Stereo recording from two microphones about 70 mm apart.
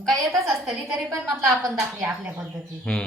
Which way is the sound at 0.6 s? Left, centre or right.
Centre.